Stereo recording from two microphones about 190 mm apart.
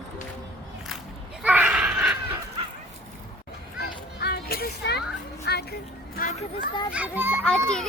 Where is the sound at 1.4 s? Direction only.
5° right (ahead or behind).